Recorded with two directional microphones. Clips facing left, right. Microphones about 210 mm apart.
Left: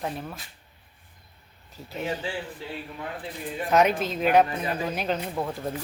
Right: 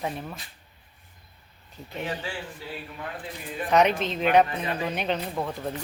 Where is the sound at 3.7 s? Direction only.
5° left (ahead or behind).